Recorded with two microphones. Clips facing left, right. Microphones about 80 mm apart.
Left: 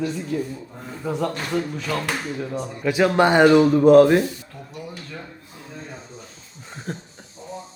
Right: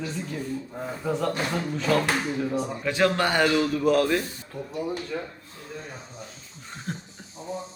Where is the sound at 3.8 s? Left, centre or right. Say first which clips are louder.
Left 10 dB; left.